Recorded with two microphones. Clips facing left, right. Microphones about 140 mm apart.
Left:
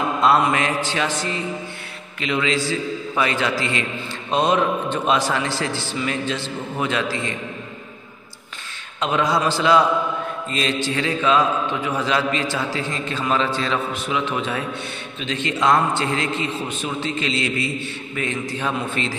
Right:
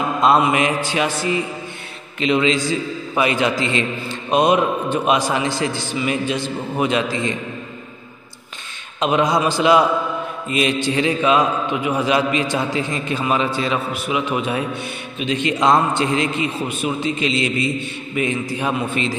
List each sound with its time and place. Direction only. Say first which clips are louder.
0.4 s a man's voice: right 3 dB; 15° right (ahead or behind)
2.1 s a man's voice: right 5 dB; 20° right (ahead or behind)
9.0 s a man's voice: right 3 dB; 20° right (ahead or behind)